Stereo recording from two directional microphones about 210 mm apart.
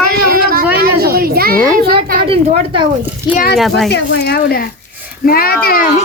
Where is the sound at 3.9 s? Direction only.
50° left (ahead or behind).